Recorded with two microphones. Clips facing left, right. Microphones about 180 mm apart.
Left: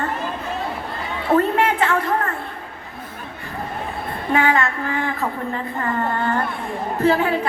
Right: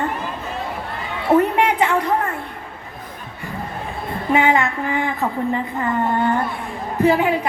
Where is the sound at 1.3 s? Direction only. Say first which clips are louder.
Right 2 dB; 15° right (ahead or behind).